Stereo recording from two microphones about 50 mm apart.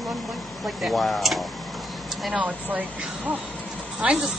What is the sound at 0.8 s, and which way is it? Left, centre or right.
Speech, centre.